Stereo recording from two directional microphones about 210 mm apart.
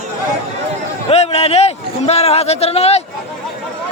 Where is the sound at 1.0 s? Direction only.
30° left (ahead or behind).